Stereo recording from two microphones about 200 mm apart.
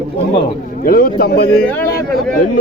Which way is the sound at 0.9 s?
45° left (ahead or behind).